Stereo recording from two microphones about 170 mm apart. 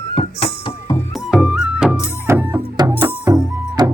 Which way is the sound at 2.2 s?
15° right (ahead or behind).